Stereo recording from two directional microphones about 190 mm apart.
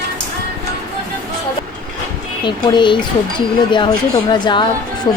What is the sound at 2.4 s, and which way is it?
Speech, 25° left (ahead or behind).